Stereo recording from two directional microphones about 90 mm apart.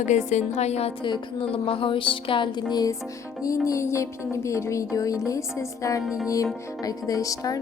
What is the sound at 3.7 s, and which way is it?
Speech, 35° left (ahead or behind).